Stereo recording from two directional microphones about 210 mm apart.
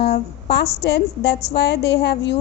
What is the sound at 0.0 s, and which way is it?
A woman's voice, 50° left (ahead or behind).